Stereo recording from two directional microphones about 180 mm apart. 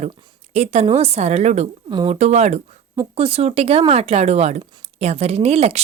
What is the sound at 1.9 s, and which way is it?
Speech, 25° right (ahead or behind).